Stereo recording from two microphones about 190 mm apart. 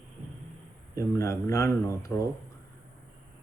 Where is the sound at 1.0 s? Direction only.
15° left (ahead or behind).